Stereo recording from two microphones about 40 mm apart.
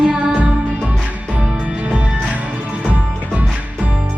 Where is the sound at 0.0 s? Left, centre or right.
Right.